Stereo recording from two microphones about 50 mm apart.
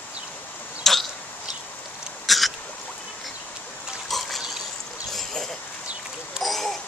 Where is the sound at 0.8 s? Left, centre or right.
Centre.